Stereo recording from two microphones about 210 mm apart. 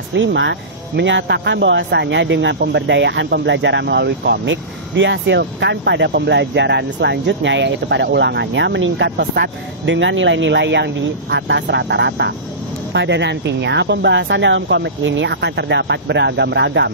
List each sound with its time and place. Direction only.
0.1 s speech: 60° right (ahead or behind)